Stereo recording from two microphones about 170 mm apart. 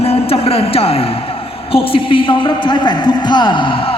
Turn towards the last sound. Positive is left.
turn(degrees=30)  # may be behind; listen again after turning